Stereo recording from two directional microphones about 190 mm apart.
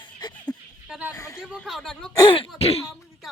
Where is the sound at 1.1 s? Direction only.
15° left (ahead or behind).